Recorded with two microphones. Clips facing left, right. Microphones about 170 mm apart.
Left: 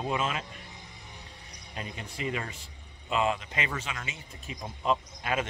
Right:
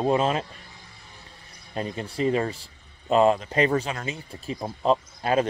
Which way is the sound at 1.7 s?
35° right (ahead or behind).